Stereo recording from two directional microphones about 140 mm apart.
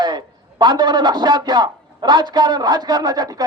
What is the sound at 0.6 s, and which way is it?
A man's voice, 30° right (ahead or behind).